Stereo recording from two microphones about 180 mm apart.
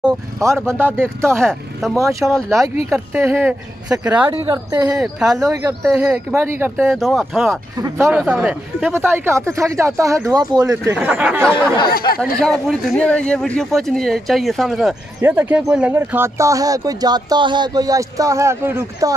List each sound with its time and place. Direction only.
0.7 s speech: 10° right (ahead or behind)
1.3 s speech: 5° left (ahead or behind)
2.0 s speech: 15° right (ahead or behind)
2.2 s speech: centre (ahead or behind)
2.9 s speech: 10° right (ahead or behind)
4.3 s a woman's voice: 25° right (ahead or behind)
5.0 s speech: 5° right (ahead or behind)
5.4 s a woman's voice: 20° right (ahead or behind)
6.9 s speech: centre (ahead or behind)
12.2 s speech: 5° left (ahead or behind)
15.1 s speech: 10° right (ahead or behind)